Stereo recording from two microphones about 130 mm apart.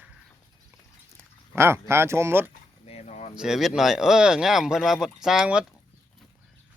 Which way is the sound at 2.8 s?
55° left (ahead or behind).